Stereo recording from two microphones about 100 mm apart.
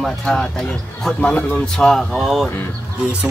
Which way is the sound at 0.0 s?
5° left (ahead or behind).